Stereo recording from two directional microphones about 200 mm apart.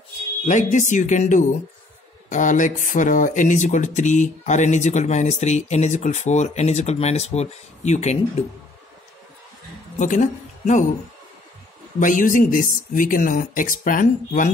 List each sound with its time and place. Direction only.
0.5 s speech: 40° left (ahead or behind)
9.9 s a woman's voice: 40° left (ahead or behind)
12.0 s speech: 40° left (ahead or behind)